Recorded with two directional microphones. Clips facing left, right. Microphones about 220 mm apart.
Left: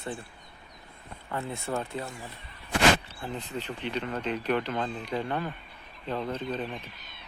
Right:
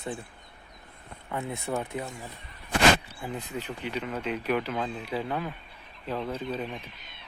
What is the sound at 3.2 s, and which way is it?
Speech, 10° right (ahead or behind).